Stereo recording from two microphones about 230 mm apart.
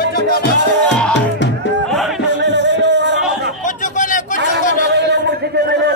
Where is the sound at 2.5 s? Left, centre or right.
Right.